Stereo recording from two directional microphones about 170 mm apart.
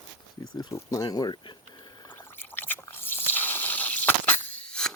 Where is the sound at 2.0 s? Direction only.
15° left (ahead or behind).